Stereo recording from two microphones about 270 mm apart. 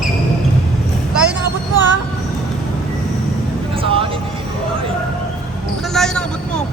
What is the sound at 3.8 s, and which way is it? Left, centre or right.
Vehicle, centre.